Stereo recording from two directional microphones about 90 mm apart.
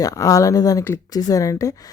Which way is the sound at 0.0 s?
40° left (ahead or behind).